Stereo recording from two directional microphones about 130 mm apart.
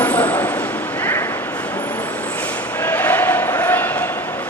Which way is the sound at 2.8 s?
15° left (ahead or behind).